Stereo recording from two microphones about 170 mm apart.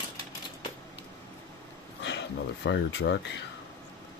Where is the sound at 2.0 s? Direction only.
90° left.